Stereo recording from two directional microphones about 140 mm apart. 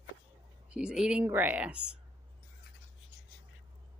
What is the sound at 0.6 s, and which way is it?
Speech, 5° right (ahead or behind).